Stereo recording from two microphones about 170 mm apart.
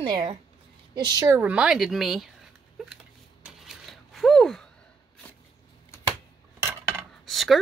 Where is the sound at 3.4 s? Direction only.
Centre (ahead or behind).